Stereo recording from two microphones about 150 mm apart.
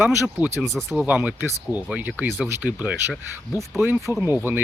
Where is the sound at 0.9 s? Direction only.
10° right (ahead or behind).